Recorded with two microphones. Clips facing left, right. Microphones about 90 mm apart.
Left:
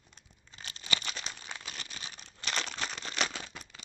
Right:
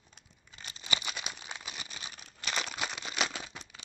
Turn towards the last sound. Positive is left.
turn(degrees=-10)  # may be behind; listen again after turning